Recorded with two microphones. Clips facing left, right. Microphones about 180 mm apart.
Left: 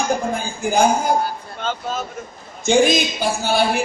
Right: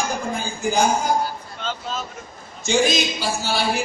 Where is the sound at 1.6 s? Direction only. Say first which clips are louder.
Left 4 dB; 50° left (ahead or behind).